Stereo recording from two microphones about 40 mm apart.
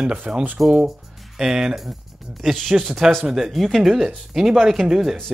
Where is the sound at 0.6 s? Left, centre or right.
Centre.